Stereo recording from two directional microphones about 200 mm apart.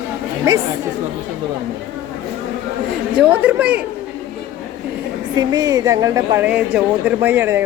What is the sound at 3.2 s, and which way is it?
Speech, 10° right (ahead or behind).